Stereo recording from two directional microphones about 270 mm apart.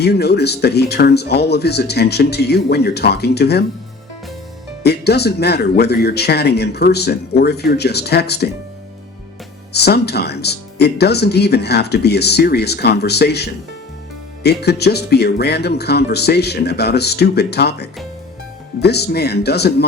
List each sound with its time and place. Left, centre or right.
0.0 s speech: left
4.8 s speech: left
9.7 s speech: left